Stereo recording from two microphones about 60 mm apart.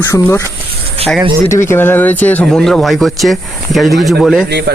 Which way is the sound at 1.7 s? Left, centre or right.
Left.